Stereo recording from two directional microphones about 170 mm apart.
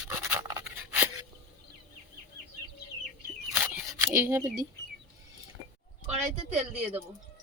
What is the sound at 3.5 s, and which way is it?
Single-lens reflex camera, 15° right (ahead or behind).